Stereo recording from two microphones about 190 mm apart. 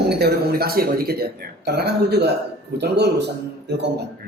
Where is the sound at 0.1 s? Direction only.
60° right (ahead or behind).